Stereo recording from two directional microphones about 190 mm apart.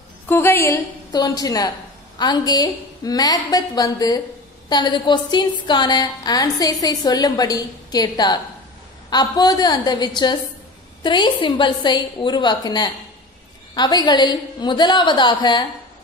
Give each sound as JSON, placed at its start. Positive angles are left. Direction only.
{"t": 0.3, "sound": "a woman's voice", "side_deg": 10}